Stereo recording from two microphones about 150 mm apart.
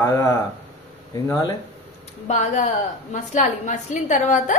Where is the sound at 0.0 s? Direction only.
20° left (ahead or behind).